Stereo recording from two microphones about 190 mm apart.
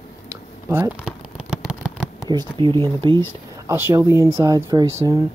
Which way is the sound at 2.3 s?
25° right (ahead or behind).